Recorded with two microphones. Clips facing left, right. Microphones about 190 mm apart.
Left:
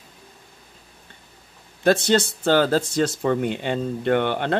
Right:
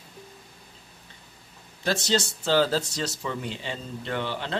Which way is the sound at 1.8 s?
55° left (ahead or behind).